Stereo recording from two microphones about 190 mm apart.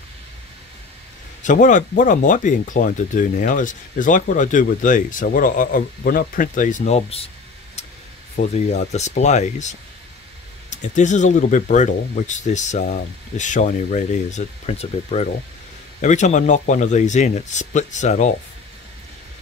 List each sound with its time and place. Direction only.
1.4 s speech: 40° left (ahead or behind)
8.4 s speech: 35° left (ahead or behind)